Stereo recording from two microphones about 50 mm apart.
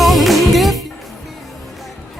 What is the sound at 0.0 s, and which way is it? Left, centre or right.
Music, centre.